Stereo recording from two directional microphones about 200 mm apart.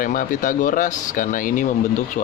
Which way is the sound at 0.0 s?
40° left (ahead or behind).